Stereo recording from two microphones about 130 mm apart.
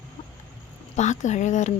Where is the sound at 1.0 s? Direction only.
65° left (ahead or behind).